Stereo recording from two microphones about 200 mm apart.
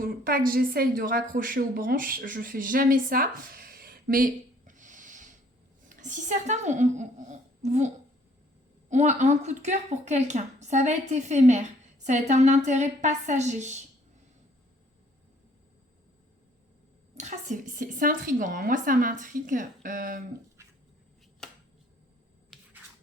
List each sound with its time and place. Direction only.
0.0 s a woman's voice: 45° right (ahead or behind)
8.9 s speech: 35° right (ahead or behind)
17.2 s speech: 35° right (ahead or behind)